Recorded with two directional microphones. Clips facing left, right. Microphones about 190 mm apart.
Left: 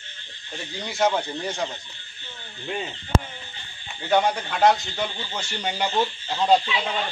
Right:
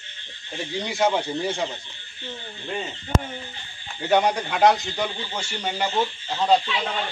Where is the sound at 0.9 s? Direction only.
5° right (ahead or behind).